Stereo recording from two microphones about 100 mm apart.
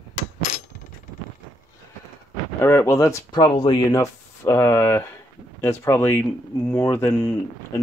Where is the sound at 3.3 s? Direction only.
50° left (ahead or behind).